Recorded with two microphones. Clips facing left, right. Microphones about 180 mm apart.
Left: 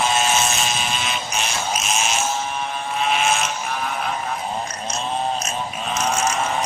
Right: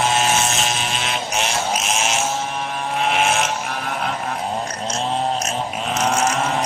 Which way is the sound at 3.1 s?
70° right (ahead or behind).